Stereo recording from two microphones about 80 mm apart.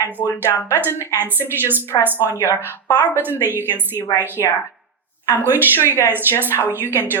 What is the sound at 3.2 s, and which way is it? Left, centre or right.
Speech, right.